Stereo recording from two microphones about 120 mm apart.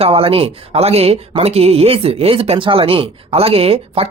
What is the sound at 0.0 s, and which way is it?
Speech, 50° right (ahead or behind).